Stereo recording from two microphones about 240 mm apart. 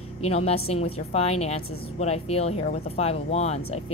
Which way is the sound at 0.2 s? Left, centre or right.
Left.